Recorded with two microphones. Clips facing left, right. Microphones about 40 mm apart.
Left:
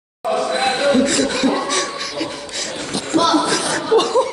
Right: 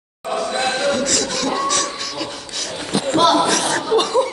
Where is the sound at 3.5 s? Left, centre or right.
Right.